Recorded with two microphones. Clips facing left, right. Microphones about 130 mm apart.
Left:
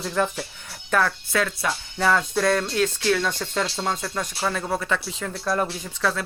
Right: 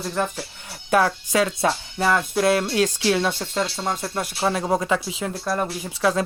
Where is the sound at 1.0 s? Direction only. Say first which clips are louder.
Right 4 dB; 20° right (ahead or behind).